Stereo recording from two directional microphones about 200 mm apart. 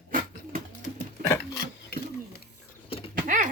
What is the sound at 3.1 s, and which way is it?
Bird, 40° right (ahead or behind).